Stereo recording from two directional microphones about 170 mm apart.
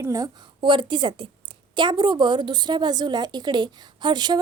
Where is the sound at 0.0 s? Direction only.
15° right (ahead or behind).